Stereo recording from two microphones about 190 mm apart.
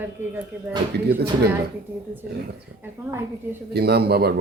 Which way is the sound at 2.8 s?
10° right (ahead or behind).